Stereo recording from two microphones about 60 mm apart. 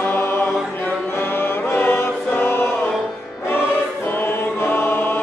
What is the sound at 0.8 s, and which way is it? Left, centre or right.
Music, left.